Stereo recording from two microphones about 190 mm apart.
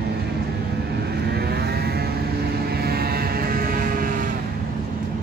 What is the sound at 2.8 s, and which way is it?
Vehicle, 55° right (ahead or behind).